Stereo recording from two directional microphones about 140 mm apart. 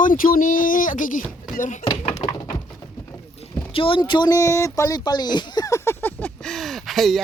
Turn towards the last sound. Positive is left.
turn(degrees=0)  # may be behind; listen again after turning